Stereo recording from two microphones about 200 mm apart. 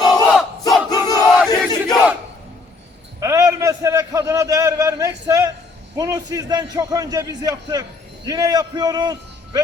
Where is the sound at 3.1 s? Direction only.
15° right (ahead or behind).